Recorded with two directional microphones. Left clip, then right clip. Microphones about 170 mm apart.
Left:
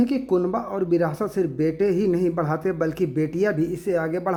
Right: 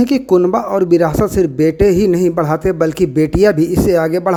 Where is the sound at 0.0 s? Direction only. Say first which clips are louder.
Right 10 dB; 30° right (ahead or behind).